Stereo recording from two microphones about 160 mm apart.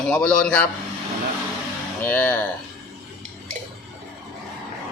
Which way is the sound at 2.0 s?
10° left (ahead or behind).